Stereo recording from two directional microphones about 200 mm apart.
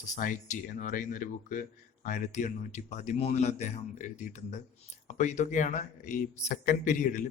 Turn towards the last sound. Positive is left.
turn(degrees=40)  # may be behind; listen again after turning